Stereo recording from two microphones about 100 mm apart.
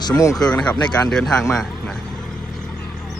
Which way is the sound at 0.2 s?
35° left (ahead or behind).